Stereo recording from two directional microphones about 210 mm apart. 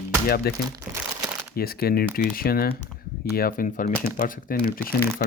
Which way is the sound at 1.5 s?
45° left (ahead or behind).